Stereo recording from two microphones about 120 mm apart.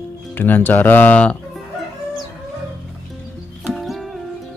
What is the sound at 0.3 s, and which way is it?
Speech, 15° left (ahead or behind).